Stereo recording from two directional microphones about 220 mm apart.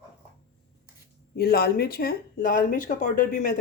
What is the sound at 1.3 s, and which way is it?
Speech, 45° left (ahead or behind).